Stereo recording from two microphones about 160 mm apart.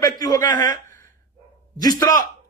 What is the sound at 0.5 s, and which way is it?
Speech, 55° right (ahead or behind).